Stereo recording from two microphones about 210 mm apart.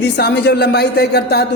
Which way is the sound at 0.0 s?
50° left (ahead or behind).